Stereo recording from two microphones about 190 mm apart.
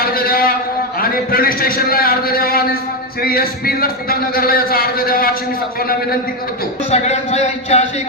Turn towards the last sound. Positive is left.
turn(degrees=35)  # may be behind; listen again after turning